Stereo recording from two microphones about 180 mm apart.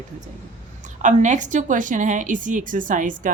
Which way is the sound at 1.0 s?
45° right (ahead or behind).